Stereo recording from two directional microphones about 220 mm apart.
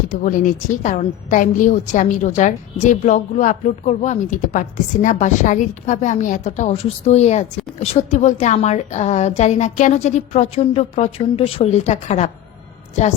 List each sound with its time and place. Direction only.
0.1 s a woman's voice: 35° left (ahead or behind)